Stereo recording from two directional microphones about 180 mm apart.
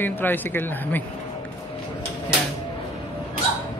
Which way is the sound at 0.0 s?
10° left (ahead or behind).